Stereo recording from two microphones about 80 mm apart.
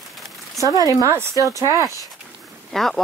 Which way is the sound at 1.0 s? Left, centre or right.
Right.